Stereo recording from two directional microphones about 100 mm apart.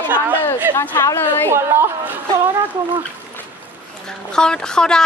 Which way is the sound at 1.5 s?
25° right (ahead or behind).